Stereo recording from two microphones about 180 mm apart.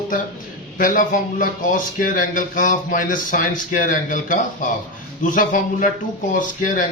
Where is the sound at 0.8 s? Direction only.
45° left (ahead or behind).